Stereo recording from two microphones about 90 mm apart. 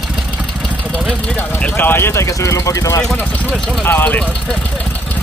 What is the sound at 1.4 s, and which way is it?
Speech, 15° left (ahead or behind).